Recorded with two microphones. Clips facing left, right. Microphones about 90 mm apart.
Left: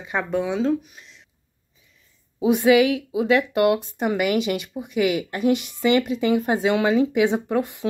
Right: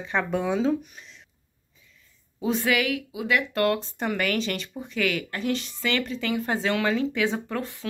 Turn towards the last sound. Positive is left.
turn(degrees=20)  # may be behind; listen again after turning